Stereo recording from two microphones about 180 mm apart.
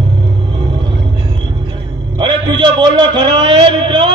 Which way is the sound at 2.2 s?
25° right (ahead or behind).